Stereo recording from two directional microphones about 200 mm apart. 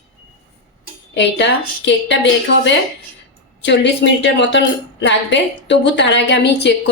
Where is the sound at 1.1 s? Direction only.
60° left (ahead or behind).